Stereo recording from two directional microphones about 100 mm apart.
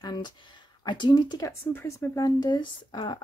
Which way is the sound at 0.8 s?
50° left (ahead or behind).